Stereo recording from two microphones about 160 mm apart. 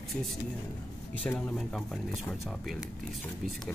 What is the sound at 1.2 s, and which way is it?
Speech, 5° left (ahead or behind).